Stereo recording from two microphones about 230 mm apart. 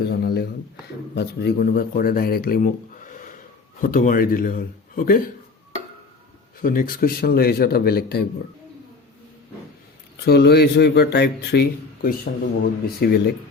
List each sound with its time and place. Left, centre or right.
0.0 s speech: left
6.6 s a man's voice: left
10.2 s a man's voice: left